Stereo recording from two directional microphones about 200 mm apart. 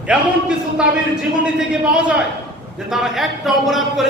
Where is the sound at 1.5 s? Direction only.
5° right (ahead or behind).